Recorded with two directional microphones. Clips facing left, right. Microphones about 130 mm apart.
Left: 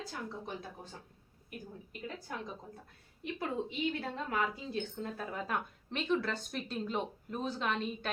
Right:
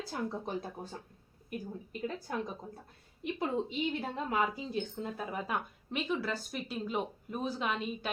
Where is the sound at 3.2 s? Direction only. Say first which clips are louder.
Right 3 dB; 20° right (ahead or behind).